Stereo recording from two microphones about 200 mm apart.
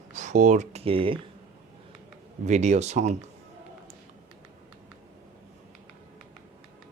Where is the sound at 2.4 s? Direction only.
35° right (ahead or behind).